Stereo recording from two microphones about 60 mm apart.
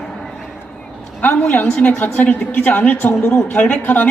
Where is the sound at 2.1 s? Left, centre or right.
Left.